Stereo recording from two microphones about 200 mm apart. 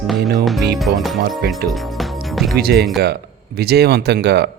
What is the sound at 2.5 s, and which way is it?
Speech, 50° right (ahead or behind).